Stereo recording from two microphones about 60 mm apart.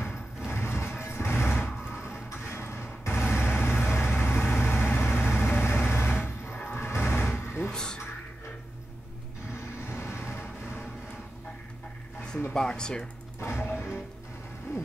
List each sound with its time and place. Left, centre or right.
0.5 s vehicle: left
7.7 s music: centre
9.8 s vehicle: left
12.5 s speech: centre
13.4 s music: left
14.7 s a sound: left